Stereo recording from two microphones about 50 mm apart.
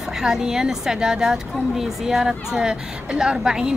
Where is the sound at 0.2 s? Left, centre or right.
Centre.